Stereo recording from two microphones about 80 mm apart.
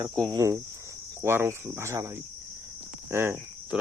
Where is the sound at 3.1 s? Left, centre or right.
Right.